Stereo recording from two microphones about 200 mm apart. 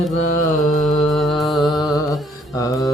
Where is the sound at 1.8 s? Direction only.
20° left (ahead or behind).